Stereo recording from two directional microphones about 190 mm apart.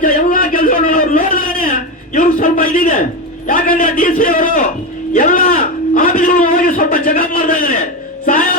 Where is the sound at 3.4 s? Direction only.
45° left (ahead or behind).